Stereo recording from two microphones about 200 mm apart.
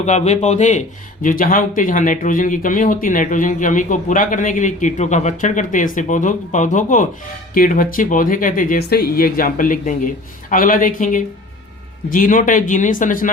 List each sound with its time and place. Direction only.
0.0 s speech: 35° left (ahead or behind)